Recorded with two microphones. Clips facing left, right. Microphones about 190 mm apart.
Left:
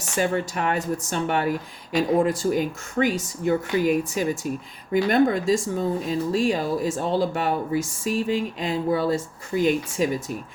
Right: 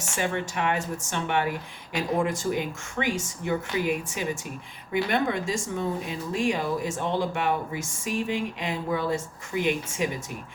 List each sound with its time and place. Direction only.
0.2 s speech: 40° left (ahead or behind)